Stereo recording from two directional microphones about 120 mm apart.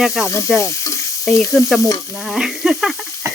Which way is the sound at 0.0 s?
5° right (ahead or behind).